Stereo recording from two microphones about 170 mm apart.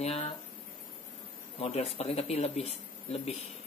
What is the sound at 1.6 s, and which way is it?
Speech, 35° left (ahead or behind).